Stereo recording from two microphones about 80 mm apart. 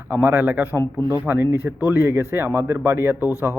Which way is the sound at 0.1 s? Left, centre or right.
Right.